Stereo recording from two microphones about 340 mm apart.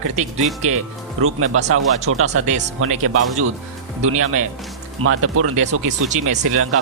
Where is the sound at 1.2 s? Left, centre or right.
Right.